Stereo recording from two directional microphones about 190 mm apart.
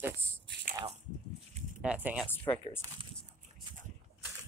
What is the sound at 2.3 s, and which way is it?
Speech, 10° left (ahead or behind).